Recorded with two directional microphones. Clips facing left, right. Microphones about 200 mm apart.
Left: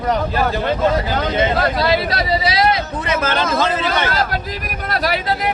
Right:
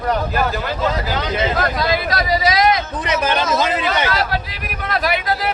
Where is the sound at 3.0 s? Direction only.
15° right (ahead or behind).